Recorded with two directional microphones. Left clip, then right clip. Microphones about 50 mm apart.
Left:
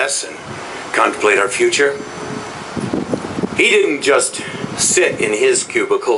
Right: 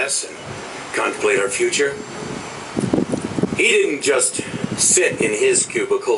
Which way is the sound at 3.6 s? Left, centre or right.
Left.